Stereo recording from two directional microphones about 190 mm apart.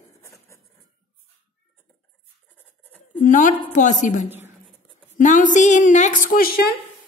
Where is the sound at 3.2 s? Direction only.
45° left (ahead or behind).